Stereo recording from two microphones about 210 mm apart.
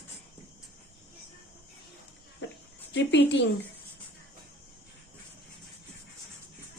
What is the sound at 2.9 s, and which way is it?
Speech, 55° left (ahead or behind).